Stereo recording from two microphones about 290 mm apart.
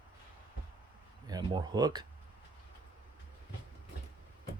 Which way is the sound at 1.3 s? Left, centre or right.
Centre.